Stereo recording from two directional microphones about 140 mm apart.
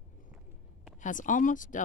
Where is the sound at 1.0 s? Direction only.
70° left (ahead or behind).